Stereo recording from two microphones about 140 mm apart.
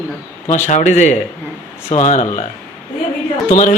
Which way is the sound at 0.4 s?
55° left (ahead or behind).